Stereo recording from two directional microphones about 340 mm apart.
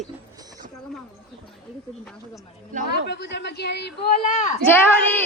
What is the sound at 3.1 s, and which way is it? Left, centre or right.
Speech, left.